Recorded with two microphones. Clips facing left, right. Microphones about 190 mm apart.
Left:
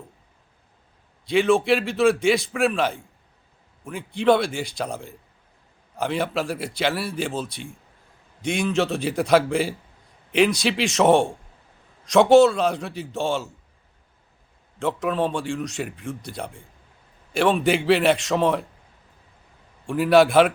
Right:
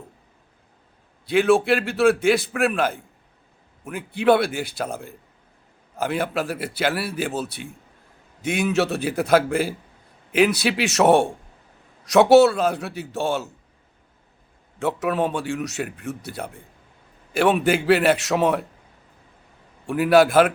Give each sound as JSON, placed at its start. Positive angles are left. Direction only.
{"t": 1.3, "sound": "a man's voice", "side_deg": -5}
{"t": 14.8, "sound": "a man's voice", "side_deg": -5}
{"t": 19.9, "sound": "a man's voice", "side_deg": -5}